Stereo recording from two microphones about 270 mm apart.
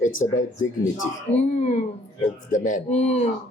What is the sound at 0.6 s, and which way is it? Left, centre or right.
Speech, left.